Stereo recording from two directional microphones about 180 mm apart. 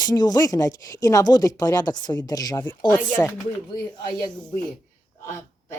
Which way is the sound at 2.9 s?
10° left (ahead or behind).